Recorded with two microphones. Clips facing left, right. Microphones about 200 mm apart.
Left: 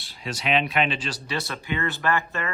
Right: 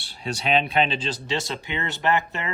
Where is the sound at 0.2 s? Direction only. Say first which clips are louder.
Right 2 dB; 30° right (ahead or behind).